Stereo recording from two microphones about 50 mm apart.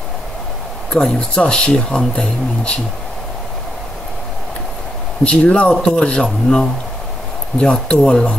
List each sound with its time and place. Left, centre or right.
1.3 s speech: centre
5.2 s speech: left